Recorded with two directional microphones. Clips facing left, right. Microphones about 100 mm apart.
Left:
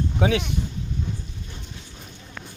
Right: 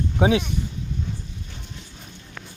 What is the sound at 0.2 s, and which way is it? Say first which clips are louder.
Speech: right 3 dB; 20° right (ahead or behind).